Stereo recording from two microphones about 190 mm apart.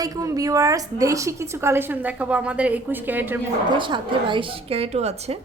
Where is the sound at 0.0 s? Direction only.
20° right (ahead or behind).